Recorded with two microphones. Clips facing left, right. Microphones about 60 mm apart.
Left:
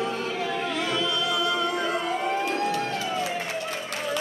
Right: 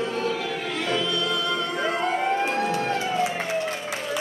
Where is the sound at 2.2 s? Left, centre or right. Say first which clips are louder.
Right 2 dB; right.